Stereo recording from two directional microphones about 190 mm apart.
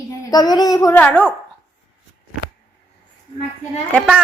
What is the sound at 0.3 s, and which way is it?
Speech, 20° left (ahead or behind).